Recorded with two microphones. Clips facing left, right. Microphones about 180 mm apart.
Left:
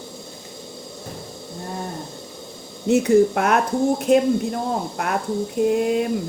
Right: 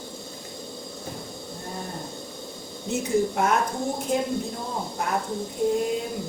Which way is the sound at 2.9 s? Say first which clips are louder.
Left 9 dB; 75° left (ahead or behind).